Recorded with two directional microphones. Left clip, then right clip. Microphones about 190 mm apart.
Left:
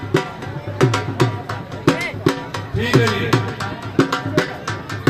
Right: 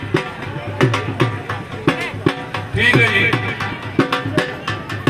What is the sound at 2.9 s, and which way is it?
Music, 40° right (ahead or behind).